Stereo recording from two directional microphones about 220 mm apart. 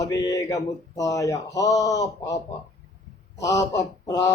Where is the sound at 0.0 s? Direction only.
15° left (ahead or behind).